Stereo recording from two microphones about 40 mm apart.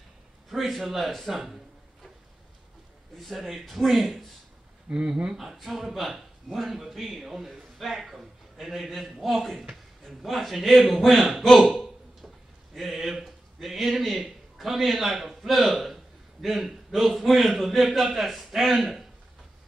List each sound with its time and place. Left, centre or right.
0.5 s a man's voice: centre
3.2 s a man's voice: centre
4.9 s speech: right
5.4 s a man's voice: centre